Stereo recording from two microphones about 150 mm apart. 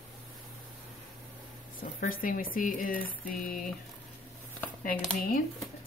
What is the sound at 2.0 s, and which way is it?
Speech, 65° left (ahead or behind).